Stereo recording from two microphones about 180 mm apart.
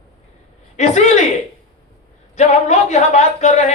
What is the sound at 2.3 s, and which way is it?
Speech, 40° left (ahead or behind).